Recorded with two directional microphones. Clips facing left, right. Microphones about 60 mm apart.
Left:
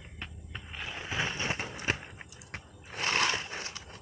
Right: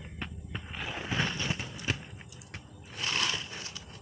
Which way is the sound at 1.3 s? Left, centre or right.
Left.